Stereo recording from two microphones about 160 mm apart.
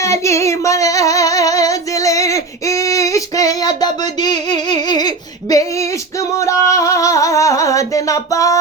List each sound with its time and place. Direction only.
0.0 s female singing: 20° left (ahead or behind)